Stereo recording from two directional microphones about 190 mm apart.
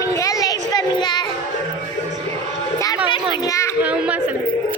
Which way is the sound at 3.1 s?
15° left (ahead or behind).